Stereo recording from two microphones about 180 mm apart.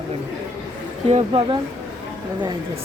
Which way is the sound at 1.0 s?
30° right (ahead or behind).